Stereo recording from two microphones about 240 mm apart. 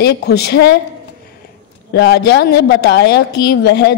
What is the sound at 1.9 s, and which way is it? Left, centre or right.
A woman's voice, left.